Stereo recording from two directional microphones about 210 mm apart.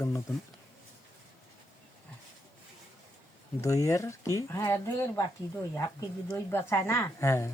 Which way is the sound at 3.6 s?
15° left (ahead or behind).